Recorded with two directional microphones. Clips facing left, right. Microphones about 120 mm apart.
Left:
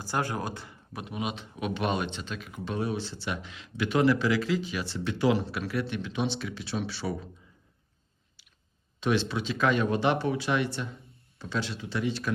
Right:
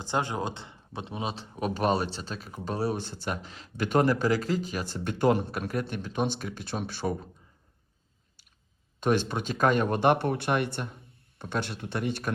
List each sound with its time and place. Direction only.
0.0 s speech: 20° right (ahead or behind); by 3.0 s 40° right (ahead or behind)
3.0 s speech: 50° right (ahead or behind)
9.0 s speech: 50° right (ahead or behind)